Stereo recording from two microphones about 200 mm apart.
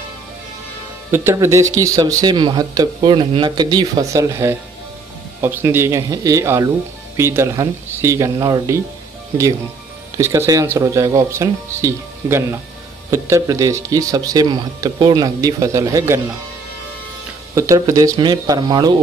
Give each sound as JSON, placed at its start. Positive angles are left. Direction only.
{"t": 1.1, "sound": "speech", "side_deg": -10}
{"t": 10.1, "sound": "speech", "side_deg": -15}
{"t": 17.6, "sound": "speech", "side_deg": -15}